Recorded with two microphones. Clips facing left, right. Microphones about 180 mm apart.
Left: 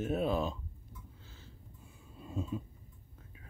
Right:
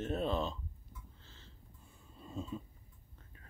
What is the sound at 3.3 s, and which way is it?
Whispering, 5° left (ahead or behind).